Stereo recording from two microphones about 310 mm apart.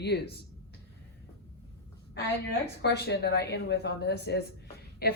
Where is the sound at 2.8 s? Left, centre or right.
Left.